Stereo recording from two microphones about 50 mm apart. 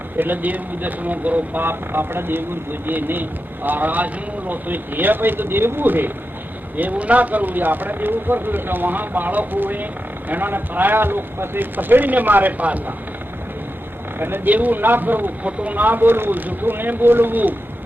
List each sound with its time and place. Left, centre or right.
0.2 s speech: right
1.6 s speech: right
14.2 s speech: right